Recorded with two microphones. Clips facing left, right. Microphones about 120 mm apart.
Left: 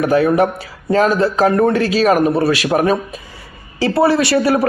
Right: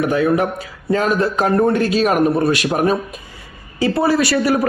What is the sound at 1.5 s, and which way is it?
Speech, 60° left (ahead or behind).